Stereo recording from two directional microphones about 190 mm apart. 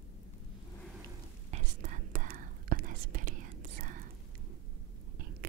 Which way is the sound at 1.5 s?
40° right (ahead or behind).